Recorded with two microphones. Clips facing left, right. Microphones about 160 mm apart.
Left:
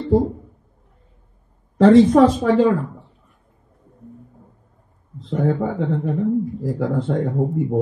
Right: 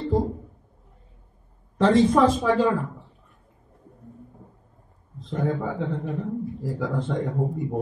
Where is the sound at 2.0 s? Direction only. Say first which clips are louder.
Left 5 dB; 55° left (ahead or behind).